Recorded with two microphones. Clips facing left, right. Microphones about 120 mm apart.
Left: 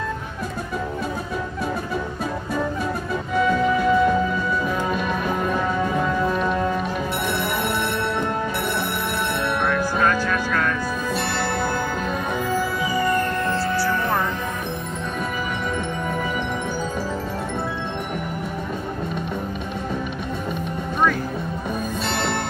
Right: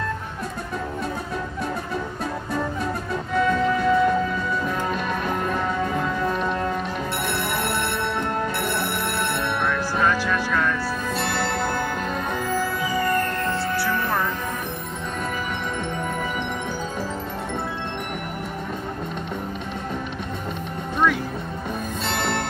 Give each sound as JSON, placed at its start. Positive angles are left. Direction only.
{"t": 3.3, "sound": "music", "side_deg": 5}
{"t": 9.7, "sound": "music", "side_deg": 0}
{"t": 22.0, "sound": "music", "side_deg": 0}